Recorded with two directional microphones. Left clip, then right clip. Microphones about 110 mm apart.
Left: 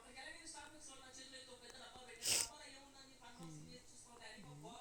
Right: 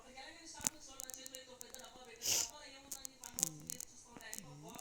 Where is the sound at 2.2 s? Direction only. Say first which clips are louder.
Right 3 dB; centre (ahead or behind).